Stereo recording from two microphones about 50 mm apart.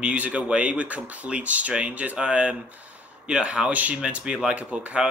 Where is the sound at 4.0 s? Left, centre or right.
Centre.